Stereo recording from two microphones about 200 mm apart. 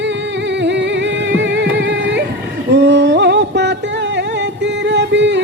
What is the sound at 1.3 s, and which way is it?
Music, 60° right (ahead or behind).